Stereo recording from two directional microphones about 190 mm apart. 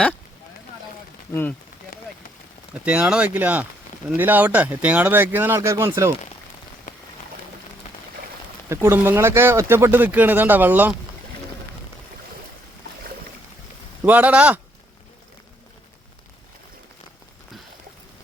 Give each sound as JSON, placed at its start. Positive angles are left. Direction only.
{"t": 1.3, "sound": "speech", "side_deg": 10}
{"t": 2.8, "sound": "speech", "side_deg": -5}
{"t": 6.9, "sound": "rain on surface", "side_deg": 45}
{"t": 8.7, "sound": "speech", "side_deg": -15}
{"t": 14.0, "sound": "speech", "side_deg": -10}